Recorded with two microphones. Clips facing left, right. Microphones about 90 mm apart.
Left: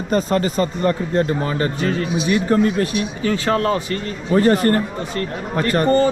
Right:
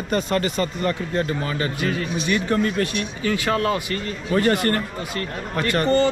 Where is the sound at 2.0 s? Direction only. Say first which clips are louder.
Left 5 dB; centre (ahead or behind).